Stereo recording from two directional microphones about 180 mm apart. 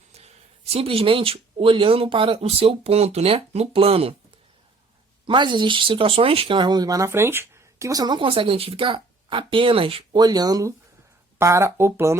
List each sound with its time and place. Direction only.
0.1 s speech: 35° right (ahead or behind)
5.2 s speech: 25° right (ahead or behind)